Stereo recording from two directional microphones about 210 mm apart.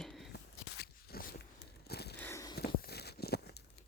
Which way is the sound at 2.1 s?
10° left (ahead or behind).